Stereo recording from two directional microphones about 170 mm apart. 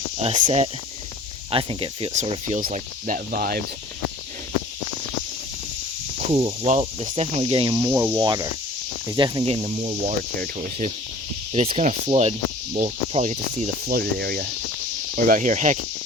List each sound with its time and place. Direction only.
0.2 s speech: 35° right (ahead or behind)
2.6 s speech: 50° right (ahead or behind)
6.3 s speech: 35° right (ahead or behind)
7.9 s speech: 15° right (ahead or behind); by 13.9 s 45° right (ahead or behind)
13.9 s speech: 60° right (ahead or behind)
15.1 s speech: 50° right (ahead or behind)